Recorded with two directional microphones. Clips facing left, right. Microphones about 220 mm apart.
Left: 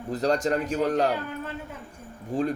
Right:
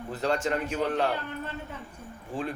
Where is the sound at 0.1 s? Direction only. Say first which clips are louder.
Left 4 dB; 40° left (ahead or behind).